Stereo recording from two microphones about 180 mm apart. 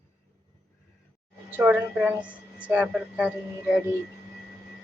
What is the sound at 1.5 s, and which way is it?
A woman's voice, 10° right (ahead or behind).